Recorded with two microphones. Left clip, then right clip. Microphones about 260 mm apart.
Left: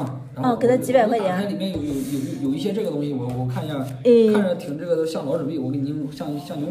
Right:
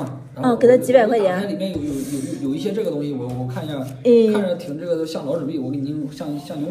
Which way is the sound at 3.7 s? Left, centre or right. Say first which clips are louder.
Right 1 dB; centre.